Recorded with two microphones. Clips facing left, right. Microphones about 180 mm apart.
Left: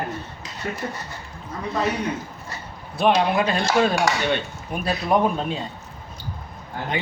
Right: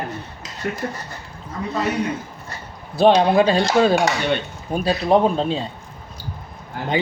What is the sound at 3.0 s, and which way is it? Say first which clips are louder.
Speech: right 5 dB; 30° right (ahead or behind).